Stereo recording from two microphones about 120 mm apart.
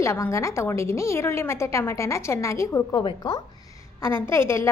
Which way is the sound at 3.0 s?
40° left (ahead or behind).